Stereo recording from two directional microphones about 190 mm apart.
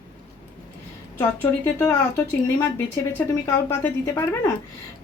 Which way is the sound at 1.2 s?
10° left (ahead or behind).